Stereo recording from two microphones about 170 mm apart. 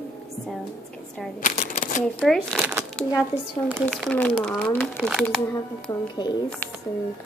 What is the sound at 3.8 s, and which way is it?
A woman's voice, 5° left (ahead or behind).